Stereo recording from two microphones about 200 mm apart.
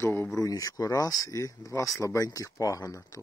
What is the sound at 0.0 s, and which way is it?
Speech, 15° left (ahead or behind).